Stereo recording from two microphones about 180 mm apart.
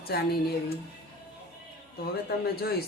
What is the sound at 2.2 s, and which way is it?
Speech, 60° left (ahead or behind).